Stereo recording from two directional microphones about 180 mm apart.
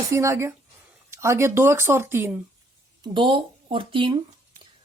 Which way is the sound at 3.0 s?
25° right (ahead or behind).